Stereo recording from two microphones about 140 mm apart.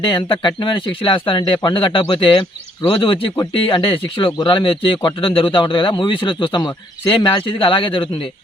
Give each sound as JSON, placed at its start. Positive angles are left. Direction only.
{"t": 0.0, "sound": "speech", "side_deg": 35}